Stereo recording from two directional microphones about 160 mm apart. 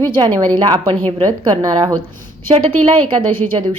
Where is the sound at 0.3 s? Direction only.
25° right (ahead or behind).